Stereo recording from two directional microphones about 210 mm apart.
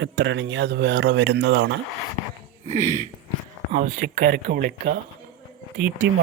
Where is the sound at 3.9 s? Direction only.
55° right (ahead or behind).